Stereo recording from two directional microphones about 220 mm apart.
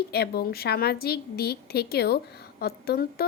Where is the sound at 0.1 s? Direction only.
45° left (ahead or behind).